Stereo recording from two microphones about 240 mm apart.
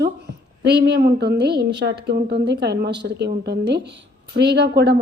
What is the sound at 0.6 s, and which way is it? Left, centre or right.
A woman's voice, right.